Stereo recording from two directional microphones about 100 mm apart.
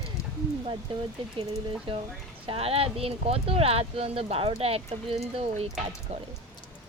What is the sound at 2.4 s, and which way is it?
Speech, 80° right.